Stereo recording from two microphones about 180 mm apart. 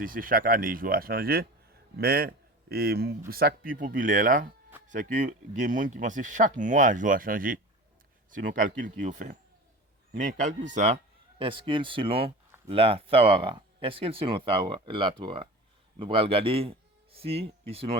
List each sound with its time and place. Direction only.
0.0 s speech: 50° right (ahead or behind); by 17.9 s 35° right (ahead or behind)